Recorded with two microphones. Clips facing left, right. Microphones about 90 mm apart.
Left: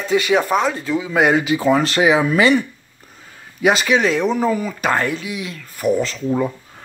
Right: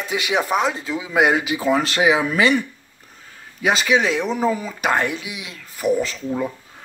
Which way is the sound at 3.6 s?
Centre (ahead or behind).